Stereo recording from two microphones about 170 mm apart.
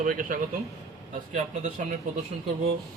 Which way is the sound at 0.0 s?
55° right (ahead or behind).